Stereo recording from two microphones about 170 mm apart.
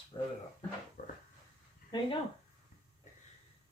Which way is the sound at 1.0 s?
50° left (ahead or behind).